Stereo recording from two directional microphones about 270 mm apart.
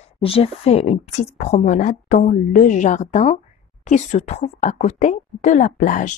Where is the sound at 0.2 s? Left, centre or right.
Left.